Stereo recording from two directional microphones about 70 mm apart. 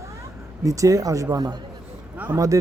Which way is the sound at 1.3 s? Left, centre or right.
Right.